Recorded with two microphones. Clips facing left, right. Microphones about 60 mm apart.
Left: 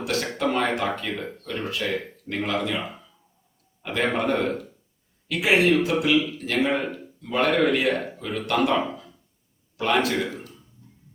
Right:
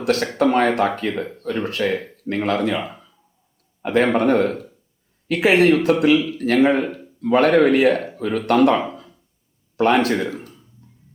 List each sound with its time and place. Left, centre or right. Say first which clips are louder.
0.0 s speech: right 7 dB; right
8.8 s a sound: right 1 dB; right
9.7 s speech: right 6 dB; right